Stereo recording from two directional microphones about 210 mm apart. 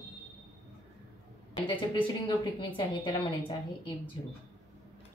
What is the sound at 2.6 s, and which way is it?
Speech, 25° left (ahead or behind).